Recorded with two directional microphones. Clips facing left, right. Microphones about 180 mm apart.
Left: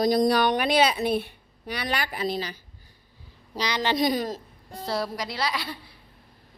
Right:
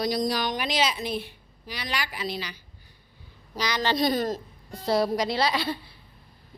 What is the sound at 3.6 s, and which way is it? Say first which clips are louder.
Speech: left 1 dB; 25° left (ahead or behind).